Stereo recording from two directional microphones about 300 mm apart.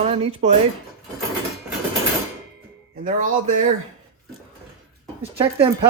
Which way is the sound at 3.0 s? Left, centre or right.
Right.